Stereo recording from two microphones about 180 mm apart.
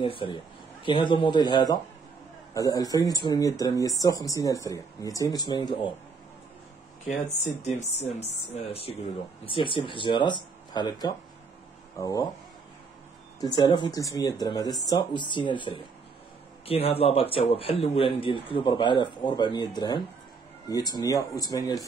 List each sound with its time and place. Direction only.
0.0 s speech: 30° left (ahead or behind)
7.2 s speech: 40° left (ahead or behind); by 12.3 s 20° left (ahead or behind)
13.4 s speech: 20° left (ahead or behind)